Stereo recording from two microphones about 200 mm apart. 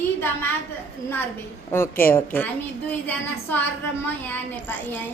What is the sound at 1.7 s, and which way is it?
Speech, 10° left (ahead or behind).